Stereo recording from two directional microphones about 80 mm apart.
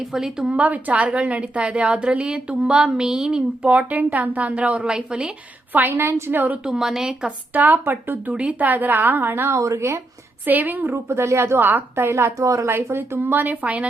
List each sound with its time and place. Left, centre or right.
0.0 s a woman's voice: centre
5.7 s a woman's voice: right
6.7 s a woman's voice: centre
7.5 s a woman's voice: right
9.6 s a woman's voice: right
10.4 s a woman's voice: right
10.9 s a woman's voice: right
12.7 s a woman's voice: right